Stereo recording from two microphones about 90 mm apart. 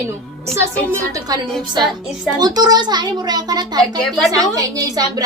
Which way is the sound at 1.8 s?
5° right (ahead or behind).